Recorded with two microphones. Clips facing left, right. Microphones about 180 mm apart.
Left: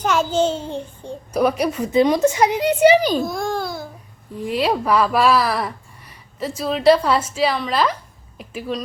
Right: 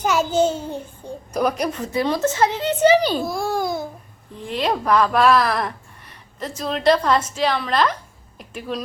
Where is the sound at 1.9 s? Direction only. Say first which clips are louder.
Left 7 dB; 20° left (ahead or behind).